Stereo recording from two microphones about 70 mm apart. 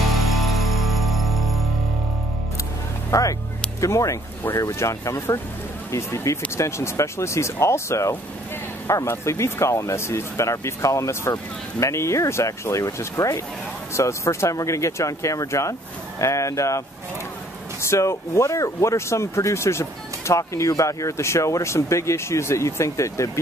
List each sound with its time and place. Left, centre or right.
0.1 s music: centre
3.1 s speech: left
17.8 s speech: left